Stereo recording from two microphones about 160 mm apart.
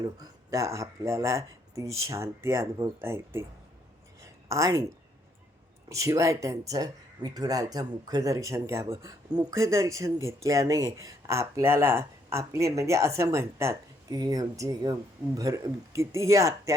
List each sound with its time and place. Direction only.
0.0 s speech: 20° right (ahead or behind)
4.2 s a sound: 20° right (ahead or behind)
5.9 s speech: 20° right (ahead or behind)